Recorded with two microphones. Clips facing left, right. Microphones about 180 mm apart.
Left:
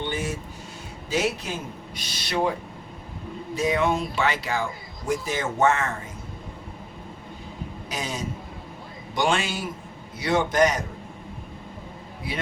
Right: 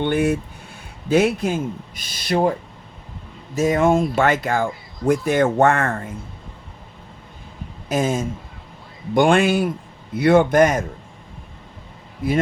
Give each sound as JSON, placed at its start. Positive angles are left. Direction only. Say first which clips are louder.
{"t": 0.0, "sound": "a man's voice", "louder": "right 10 dB", "side_deg": -60}
{"t": 3.5, "sound": "speech", "louder": "right 6 dB", "side_deg": -45}
{"t": 7.9, "sound": "a man's voice", "louder": "right 11 dB", "side_deg": -50}
{"t": 12.2, "sound": "speech", "louder": "right 12 dB", "side_deg": -50}